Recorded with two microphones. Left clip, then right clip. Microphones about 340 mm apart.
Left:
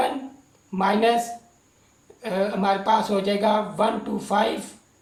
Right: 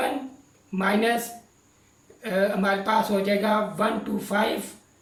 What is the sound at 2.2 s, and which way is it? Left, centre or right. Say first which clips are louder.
Speech: even; centre.